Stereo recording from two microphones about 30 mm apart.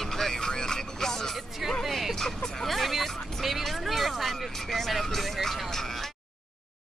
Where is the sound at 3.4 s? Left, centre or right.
Centre.